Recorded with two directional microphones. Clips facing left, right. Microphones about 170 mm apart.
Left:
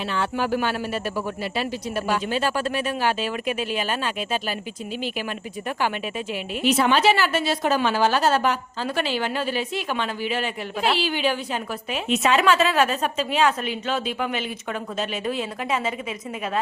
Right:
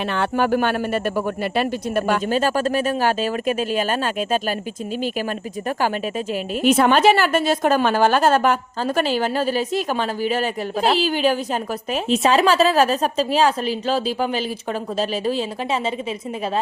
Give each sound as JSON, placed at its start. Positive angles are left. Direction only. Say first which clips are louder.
{"t": 0.1, "sound": "speech", "louder": "right 4 dB", "side_deg": -60}
{"t": 5.6, "sound": "a woman's voice", "louder": "right 4 dB", "side_deg": -40}